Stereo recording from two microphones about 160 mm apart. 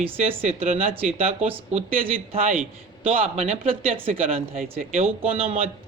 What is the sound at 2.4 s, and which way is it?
Speech, 55° right (ahead or behind).